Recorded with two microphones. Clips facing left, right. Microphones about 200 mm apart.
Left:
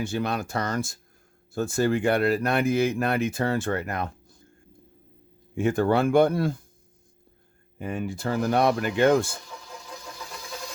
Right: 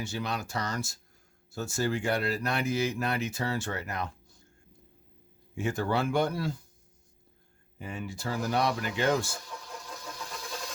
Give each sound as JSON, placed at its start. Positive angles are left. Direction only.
{"t": 0.0, "sound": "speech", "side_deg": 55}
{"t": 5.5, "sound": "speech", "side_deg": 55}
{"t": 7.8, "sound": "speech", "side_deg": 55}
{"t": 9.5, "sound": "vehicle", "side_deg": 0}